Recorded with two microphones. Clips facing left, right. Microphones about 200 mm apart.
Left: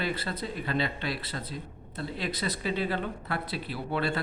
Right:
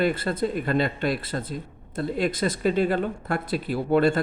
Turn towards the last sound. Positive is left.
turn(degrees=-45)  # may be behind; listen again after turning